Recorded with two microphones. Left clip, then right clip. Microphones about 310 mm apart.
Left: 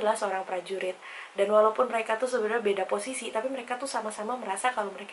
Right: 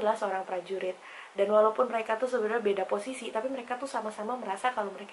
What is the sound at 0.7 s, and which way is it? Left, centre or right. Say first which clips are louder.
Speech: left 1 dB; centre.